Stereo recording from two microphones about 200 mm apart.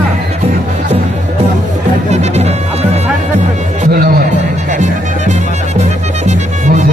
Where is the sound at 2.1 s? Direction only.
35° right (ahead or behind).